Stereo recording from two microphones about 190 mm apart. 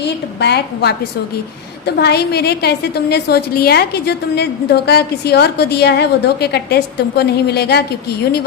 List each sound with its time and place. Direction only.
0.3 s a woman's voice: 60° left (ahead or behind)
2.0 s a woman's voice: 60° left (ahead or behind)